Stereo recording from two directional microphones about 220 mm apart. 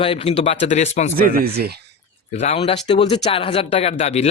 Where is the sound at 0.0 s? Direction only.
25° left (ahead or behind).